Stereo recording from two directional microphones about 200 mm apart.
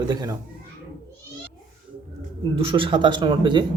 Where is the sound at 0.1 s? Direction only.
20° right (ahead or behind).